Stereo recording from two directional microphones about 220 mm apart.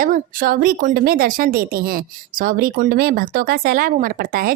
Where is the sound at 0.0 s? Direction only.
40° right (ahead or behind).